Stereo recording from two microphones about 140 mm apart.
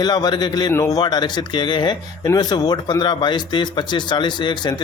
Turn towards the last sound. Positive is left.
turn(degrees=30)  # may be behind; listen again after turning